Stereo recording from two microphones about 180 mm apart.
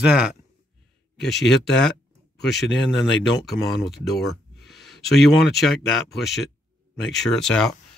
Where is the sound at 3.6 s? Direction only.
Centre (ahead or behind).